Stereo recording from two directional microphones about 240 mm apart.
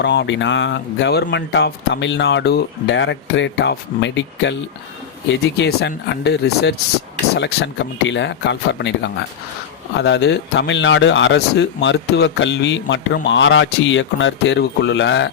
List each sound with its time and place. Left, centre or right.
0.0 s speech: left